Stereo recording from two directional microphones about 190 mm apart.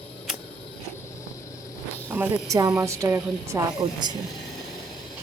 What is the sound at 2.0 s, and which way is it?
A woman's voice, 10° right (ahead or behind).